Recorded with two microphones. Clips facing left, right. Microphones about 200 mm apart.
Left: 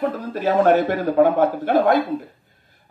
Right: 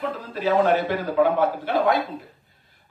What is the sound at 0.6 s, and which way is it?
Speech, 55° left (ahead or behind).